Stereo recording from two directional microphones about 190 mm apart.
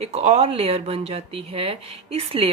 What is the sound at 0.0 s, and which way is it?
Speech, 35° right (ahead or behind).